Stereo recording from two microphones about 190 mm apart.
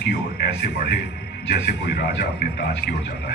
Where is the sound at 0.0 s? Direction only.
60° left (ahead or behind).